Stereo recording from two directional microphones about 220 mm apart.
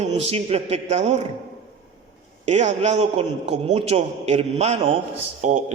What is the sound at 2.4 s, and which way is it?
A man's voice, 30° right (ahead or behind).